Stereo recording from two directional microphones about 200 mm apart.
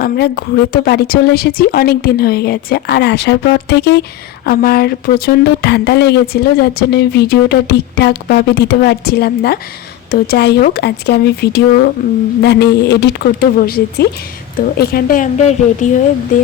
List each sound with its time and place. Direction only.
0.0 s a woman's voice: 50° left (ahead or behind)